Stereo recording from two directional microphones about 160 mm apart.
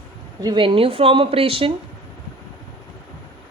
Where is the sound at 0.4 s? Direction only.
30° right (ahead or behind).